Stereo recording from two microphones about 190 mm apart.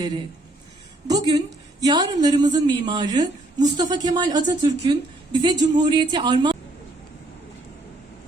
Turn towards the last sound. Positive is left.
turn(degrees=-25)  # may be behind; listen again after turning